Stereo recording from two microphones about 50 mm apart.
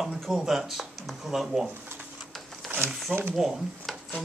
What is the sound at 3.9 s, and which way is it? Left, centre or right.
Music, centre.